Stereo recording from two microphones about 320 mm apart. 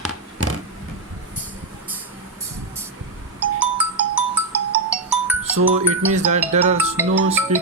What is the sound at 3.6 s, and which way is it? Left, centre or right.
Music, centre.